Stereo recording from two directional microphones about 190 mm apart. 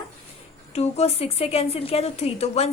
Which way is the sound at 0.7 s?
35° left (ahead or behind).